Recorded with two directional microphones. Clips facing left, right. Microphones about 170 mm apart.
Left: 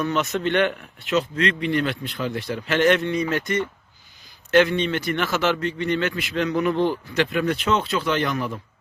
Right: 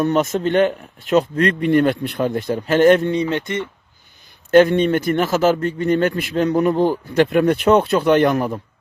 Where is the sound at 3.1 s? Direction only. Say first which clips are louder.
Right 3 dB; 30° right (ahead or behind).